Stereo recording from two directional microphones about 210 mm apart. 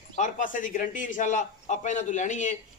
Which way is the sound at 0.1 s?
35° left (ahead or behind).